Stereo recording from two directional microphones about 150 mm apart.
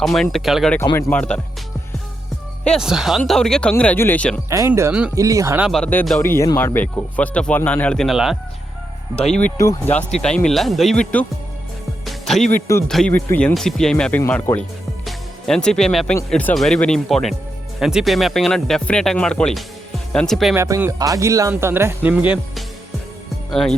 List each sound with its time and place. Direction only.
0.0 s speech: centre (ahead or behind)
2.6 s speech: 5° right (ahead or behind)
4.4 s speech: 20° right (ahead or behind)
5.6 s speech: centre (ahead or behind)
6.2 s speech: 20° left (ahead or behind); by 8.4 s centre (ahead or behind)
9.6 s speech: 20° left (ahead or behind)
9.9 s speech: 5° left (ahead or behind)
12.0 s music: centre (ahead or behind)
12.9 s speech: 5° left (ahead or behind)
13.5 s speech: centre (ahead or behind)
20.6 s speech: 20° right (ahead or behind)
23.5 s speech: centre (ahead or behind)